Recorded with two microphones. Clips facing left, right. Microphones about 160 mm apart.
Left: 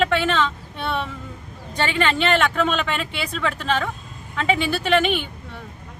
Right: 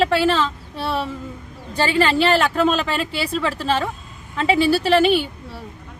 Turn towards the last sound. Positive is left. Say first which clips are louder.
# right 6 dB
turn(degrees=-35)  # may be behind; listen again after turning